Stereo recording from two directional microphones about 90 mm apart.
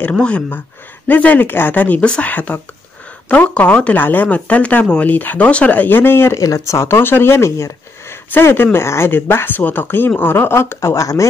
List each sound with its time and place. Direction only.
0.1 s speech: 10° left (ahead or behind)
6.4 s speech: 35° left (ahead or behind)